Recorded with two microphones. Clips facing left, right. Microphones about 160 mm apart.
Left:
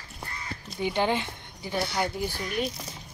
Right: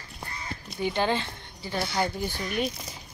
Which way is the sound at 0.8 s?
15° left (ahead or behind).